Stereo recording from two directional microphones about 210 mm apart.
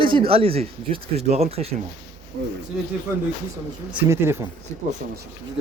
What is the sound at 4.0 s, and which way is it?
Speech, 10° right (ahead or behind).